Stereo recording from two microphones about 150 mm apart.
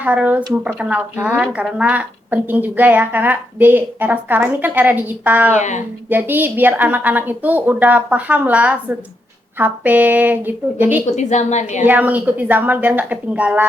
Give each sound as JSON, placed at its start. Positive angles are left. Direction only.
{"t": 0.0, "sound": "speech", "side_deg": -10}
{"t": 5.5, "sound": "a woman's voice", "side_deg": 50}
{"t": 6.1, "sound": "speech", "side_deg": -15}
{"t": 11.0, "sound": "a woman's voice", "side_deg": 50}
{"t": 11.9, "sound": "speech", "side_deg": -10}